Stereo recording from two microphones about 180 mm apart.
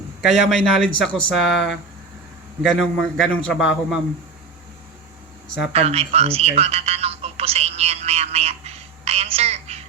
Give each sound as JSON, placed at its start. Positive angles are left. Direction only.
{"t": 0.4, "sound": "speech", "side_deg": 0}
{"t": 5.7, "sound": "telephone", "side_deg": -35}